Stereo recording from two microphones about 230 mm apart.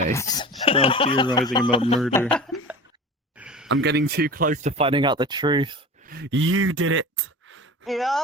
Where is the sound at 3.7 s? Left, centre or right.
Right.